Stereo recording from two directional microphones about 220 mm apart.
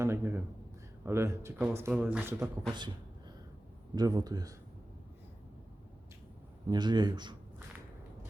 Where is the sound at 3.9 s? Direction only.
20° right (ahead or behind).